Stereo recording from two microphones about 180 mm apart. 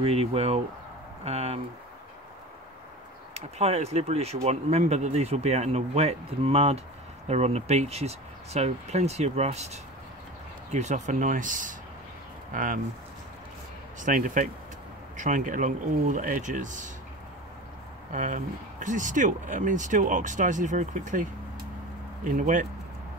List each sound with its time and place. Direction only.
0.0 s speech: 35° right (ahead or behind)
3.3 s speech: 35° right (ahead or behind)
13.9 s speech: 45° right (ahead or behind)
18.1 s speech: 45° right (ahead or behind)